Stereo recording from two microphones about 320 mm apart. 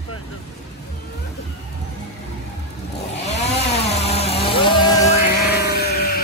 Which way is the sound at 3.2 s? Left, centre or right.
Left.